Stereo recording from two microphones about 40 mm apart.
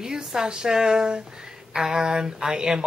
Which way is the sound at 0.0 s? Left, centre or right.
Centre.